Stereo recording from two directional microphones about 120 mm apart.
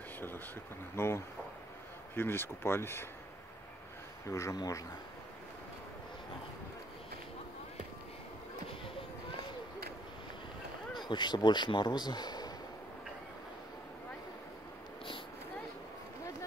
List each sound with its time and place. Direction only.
0.9 s speech: 20° left (ahead or behind)
4.3 s speech: 25° left (ahead or behind)
11.1 s a man's voice: 40° left (ahead or behind)